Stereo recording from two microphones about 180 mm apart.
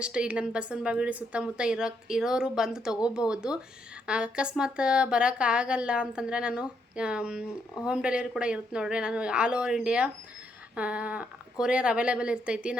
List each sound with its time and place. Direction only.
0.0 s a woman's voice: 5° right (ahead or behind)
10.8 s a sound: 5° right (ahead or behind)
11.6 s a woman's voice: 5° right (ahead or behind)